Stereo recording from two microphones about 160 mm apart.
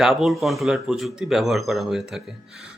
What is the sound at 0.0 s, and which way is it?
Speech, centre (ahead or behind).